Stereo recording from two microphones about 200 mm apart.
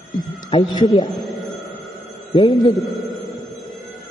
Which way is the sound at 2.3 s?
20° left (ahead or behind).